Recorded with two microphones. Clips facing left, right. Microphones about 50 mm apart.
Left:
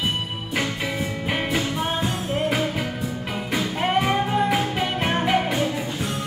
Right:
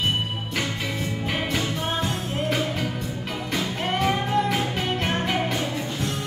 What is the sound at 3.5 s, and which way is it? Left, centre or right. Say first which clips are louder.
Music: left 4 dB; centre.